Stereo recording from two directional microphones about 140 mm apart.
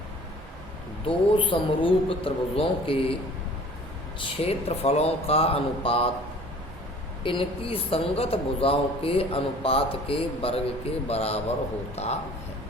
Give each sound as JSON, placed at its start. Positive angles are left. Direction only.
{"t": 1.0, "sound": "speech", "side_deg": 35}
{"t": 4.4, "sound": "a woman's voice", "side_deg": 45}
{"t": 7.3, "sound": "a woman's voice", "side_deg": 40}